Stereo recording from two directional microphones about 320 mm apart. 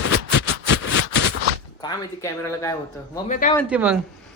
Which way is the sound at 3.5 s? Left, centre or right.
Centre.